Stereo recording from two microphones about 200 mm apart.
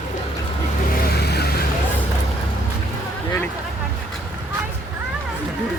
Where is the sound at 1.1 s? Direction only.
55° left (ahead or behind).